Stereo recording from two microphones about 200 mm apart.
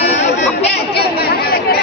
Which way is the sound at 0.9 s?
50° left (ahead or behind).